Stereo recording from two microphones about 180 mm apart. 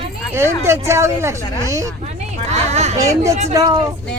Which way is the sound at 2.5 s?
40° right (ahead or behind).